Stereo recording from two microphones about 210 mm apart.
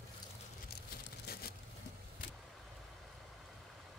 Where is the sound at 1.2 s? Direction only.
50° left (ahead or behind).